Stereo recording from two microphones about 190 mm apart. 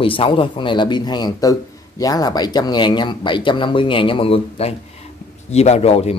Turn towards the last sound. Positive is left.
turn(degrees=35)  # may be behind; listen again after turning